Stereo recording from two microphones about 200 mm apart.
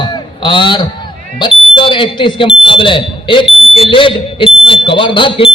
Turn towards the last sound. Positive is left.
turn(degrees=25)  # may be behind; listen again after turning